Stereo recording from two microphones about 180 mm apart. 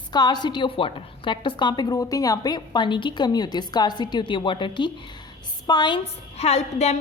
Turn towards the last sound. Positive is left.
turn(degrees=35)  # may be behind; listen again after turning